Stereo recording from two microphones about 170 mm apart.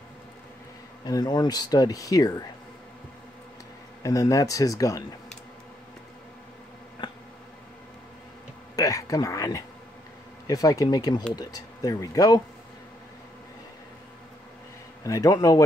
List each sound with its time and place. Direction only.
1.0 s speech: 25° left (ahead or behind)
4.0 s speech: 20° left (ahead or behind)
8.7 s speech: 20° left (ahead or behind)
15.0 s speech: 20° left (ahead or behind)